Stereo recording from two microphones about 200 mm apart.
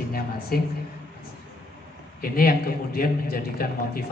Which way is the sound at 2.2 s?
50° left (ahead or behind).